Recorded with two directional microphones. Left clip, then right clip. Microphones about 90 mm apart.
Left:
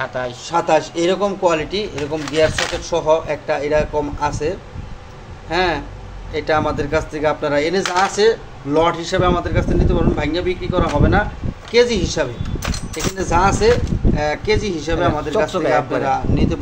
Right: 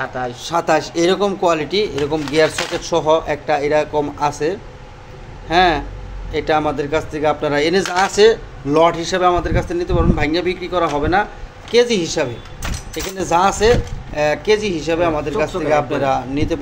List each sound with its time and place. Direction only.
0.4 s speech: 75° right (ahead or behind)
6.3 s speech: 45° right (ahead or behind)
6.6 s a man's voice: 30° right (ahead or behind)
7.4 s speech: 60° right (ahead or behind)
11.7 s speech: 60° right (ahead or behind)
13.2 s speech: 85° right
14.1 s speech: 65° right (ahead or behind); by 16.0 s 50° right (ahead or behind)
16.0 s speech: 65° right (ahead or behind)